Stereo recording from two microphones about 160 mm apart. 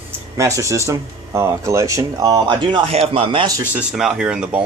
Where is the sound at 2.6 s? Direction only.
35° right (ahead or behind).